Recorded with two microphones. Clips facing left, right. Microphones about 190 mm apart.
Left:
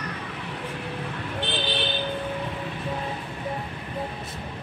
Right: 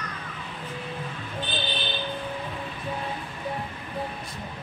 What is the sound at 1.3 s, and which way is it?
Vehicle, 75° left (ahead or behind).